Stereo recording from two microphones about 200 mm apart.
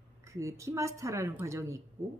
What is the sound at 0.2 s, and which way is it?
Speech, 15° right (ahead or behind).